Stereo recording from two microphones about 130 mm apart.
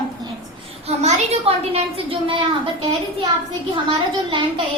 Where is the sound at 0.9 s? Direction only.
55° right (ahead or behind).